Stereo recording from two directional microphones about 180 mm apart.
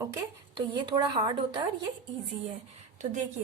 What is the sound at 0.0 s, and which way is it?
Speech, 20° right (ahead or behind).